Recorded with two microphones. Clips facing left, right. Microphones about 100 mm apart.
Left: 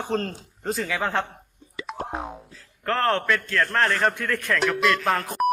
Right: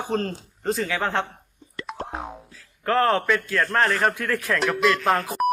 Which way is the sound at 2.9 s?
5° right (ahead or behind).